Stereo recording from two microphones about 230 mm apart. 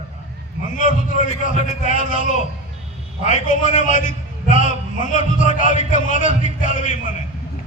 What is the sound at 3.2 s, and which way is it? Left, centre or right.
A man's voice, left.